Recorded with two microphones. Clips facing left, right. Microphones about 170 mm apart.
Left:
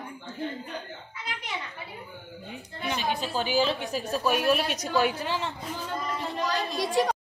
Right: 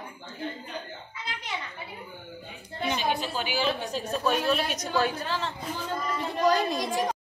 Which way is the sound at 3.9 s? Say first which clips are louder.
Even; centre (ahead or behind).